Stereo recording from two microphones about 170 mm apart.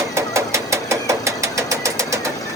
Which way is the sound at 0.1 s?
15° right (ahead or behind).